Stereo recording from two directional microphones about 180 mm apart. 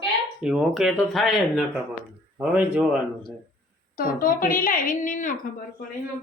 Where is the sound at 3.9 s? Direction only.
50° left (ahead or behind).